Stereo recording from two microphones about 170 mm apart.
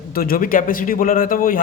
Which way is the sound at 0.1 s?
60° left (ahead or behind).